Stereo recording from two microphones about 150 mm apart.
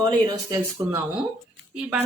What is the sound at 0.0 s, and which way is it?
Speech, 25° right (ahead or behind).